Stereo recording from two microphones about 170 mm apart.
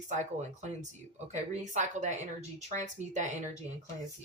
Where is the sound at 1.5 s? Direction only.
45° right (ahead or behind).